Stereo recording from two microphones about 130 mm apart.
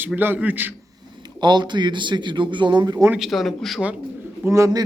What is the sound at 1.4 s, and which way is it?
A man's voice, 35° right (ahead or behind).